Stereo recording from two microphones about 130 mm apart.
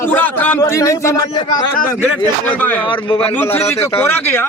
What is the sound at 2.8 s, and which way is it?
Speech, 40° left (ahead or behind).